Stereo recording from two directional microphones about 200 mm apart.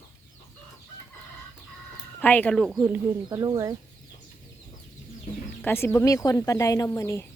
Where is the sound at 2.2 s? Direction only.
10° left (ahead or behind).